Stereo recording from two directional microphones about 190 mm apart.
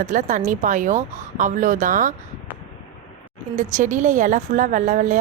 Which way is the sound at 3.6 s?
40° right (ahead or behind).